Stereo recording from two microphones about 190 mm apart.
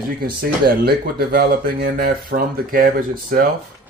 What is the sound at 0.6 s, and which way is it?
Speech, 55° right (ahead or behind).